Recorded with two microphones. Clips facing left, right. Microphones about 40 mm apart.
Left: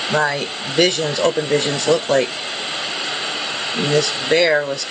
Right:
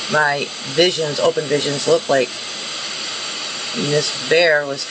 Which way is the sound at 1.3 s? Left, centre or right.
Centre.